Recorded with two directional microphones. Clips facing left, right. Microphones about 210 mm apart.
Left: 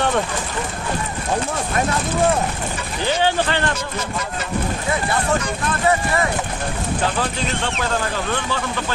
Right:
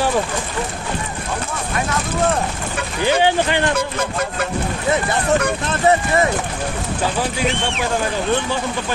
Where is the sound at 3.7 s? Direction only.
55° right (ahead or behind).